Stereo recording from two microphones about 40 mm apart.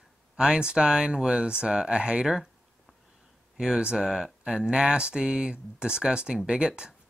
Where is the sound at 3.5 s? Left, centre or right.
Centre.